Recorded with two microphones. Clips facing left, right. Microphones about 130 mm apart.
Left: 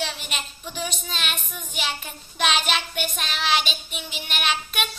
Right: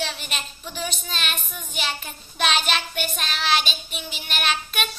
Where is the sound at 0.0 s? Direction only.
10° left (ahead or behind).